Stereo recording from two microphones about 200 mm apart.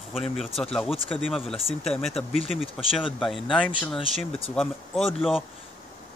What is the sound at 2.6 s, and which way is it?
Speech, 25° left (ahead or behind).